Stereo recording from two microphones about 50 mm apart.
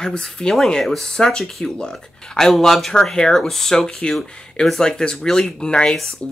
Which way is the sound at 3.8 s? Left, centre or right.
Centre.